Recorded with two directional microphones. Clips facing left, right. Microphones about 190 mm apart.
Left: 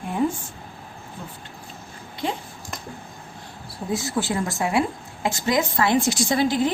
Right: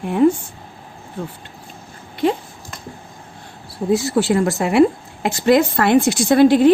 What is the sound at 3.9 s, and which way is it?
A woman's voice, 70° right (ahead or behind).